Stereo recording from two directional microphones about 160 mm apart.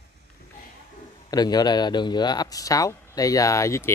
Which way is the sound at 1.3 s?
25° left (ahead or behind).